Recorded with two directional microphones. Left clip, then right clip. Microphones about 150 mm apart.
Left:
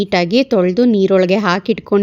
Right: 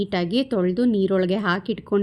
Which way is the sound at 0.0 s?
45° left (ahead or behind).